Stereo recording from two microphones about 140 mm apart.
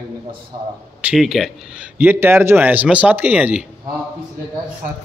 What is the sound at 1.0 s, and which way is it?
A man's voice, centre (ahead or behind).